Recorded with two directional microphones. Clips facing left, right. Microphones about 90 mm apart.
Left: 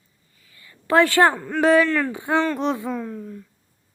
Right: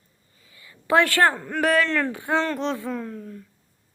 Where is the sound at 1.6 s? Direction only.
15° left (ahead or behind).